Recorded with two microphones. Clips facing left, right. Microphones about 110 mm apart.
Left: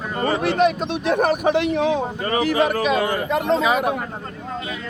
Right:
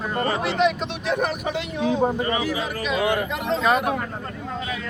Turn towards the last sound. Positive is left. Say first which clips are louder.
# left 1 dB
turn(degrees=5)  # may be behind; listen again after turning